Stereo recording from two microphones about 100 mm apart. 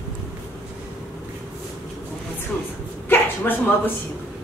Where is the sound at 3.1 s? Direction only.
20° left (ahead or behind).